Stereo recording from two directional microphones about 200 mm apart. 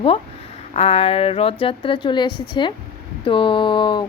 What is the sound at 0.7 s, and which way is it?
A woman's voice, 30° left (ahead or behind).